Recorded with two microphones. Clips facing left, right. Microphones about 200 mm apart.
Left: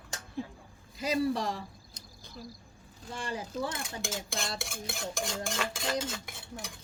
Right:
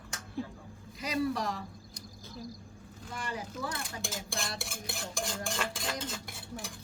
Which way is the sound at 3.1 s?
30° left (ahead or behind).